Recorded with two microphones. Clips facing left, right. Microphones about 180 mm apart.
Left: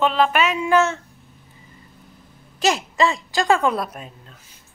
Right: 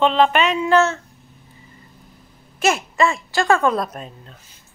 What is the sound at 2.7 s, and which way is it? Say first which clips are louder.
A woman's voice: right 1 dB; 15° left (ahead or behind).